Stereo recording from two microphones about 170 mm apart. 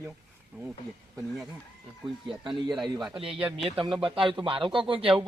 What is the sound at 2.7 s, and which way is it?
Speech, centre (ahead or behind).